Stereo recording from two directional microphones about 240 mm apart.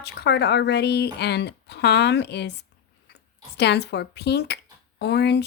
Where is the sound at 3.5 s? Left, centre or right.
Left.